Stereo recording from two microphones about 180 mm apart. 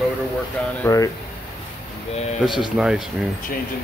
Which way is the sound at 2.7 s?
5° right (ahead or behind).